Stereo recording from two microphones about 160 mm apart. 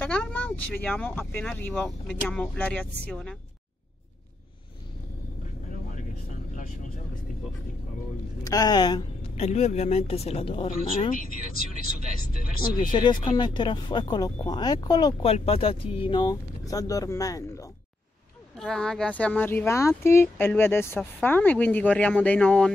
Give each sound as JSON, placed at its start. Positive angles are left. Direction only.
{"t": 0.0, "sound": "a woman's voice", "side_deg": 10}
{"t": 8.5, "sound": "speech", "side_deg": 25}
{"t": 9.3, "sound": "speech", "side_deg": 45}
{"t": 10.9, "sound": "speech", "side_deg": 60}
{"t": 12.9, "sound": "speech", "side_deg": 30}
{"t": 15.2, "sound": "speech", "side_deg": 40}
{"t": 18.6, "sound": "speech", "side_deg": 5}